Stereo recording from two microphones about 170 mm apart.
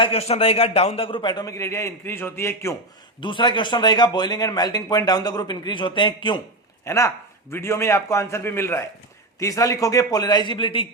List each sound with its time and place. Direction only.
0.0 s speech: 35° left (ahead or behind); by 2.7 s 15° left (ahead or behind)
3.2 s speech: 30° left (ahead or behind)
6.8 s a man's voice: 15° left (ahead or behind)